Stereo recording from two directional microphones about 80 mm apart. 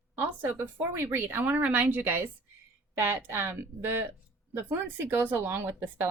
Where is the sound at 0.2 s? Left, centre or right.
Right.